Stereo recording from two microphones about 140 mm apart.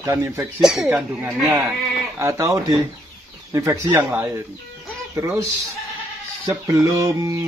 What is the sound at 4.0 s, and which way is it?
Speech, 10° right (ahead or behind).